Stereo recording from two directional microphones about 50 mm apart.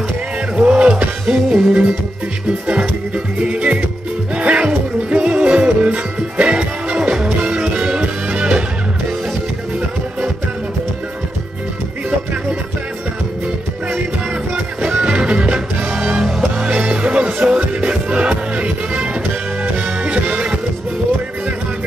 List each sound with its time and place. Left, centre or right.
0.6 s music: right
3.3 s music: right
15.0 s music: right